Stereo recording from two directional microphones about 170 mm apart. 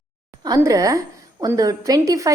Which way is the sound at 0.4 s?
20° right (ahead or behind).